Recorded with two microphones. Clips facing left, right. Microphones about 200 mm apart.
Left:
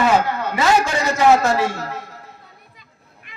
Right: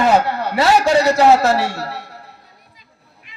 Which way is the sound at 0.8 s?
70° right (ahead or behind).